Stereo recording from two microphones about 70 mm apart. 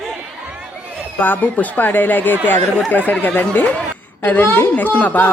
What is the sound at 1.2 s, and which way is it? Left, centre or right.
A woman's voice, left.